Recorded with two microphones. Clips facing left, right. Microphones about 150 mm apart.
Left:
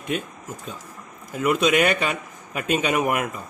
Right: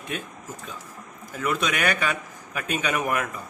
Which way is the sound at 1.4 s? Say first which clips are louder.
Left 7 dB; 20° left (ahead or behind).